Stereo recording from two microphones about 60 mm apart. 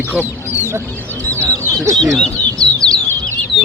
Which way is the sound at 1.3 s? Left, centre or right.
Right.